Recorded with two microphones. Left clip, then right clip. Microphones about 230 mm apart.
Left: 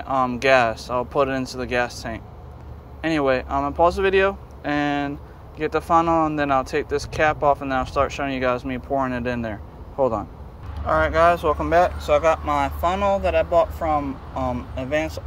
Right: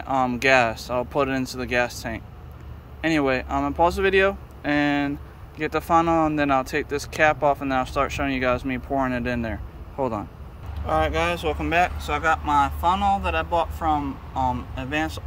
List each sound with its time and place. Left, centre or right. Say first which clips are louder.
0.1 s speech: left 1 dB; centre
0.4 s speech: left 2 dB; right
3.1 s speech: left 2 dB; centre
3.8 s speech: left 1 dB; right
6.0 s speech: left 1 dB; centre
6.3 s speech: left 1 dB; right
9.2 s speech: left 1 dB; right
9.9 s speech: left 5 dB; centre